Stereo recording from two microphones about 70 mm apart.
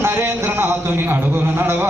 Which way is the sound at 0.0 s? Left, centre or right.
Right.